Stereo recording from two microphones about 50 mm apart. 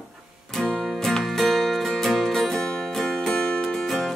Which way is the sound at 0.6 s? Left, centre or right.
Centre.